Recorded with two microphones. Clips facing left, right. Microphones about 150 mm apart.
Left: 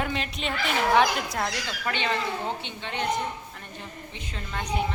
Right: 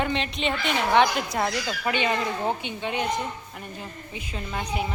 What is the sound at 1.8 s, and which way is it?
A woman's voice, 15° right (ahead or behind).